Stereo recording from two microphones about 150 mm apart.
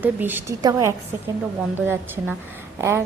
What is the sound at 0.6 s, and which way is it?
Speech, 25° right (ahead or behind).